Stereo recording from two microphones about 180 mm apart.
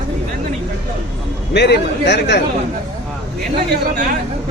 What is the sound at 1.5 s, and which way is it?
Speech, 70° left (ahead or behind).